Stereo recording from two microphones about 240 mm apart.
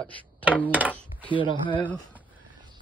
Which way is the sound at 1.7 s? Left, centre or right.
Centre.